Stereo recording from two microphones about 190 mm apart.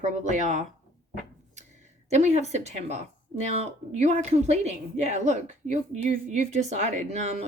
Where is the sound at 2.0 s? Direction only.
35° right (ahead or behind).